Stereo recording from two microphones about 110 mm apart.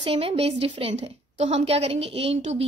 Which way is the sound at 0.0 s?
60° right (ahead or behind).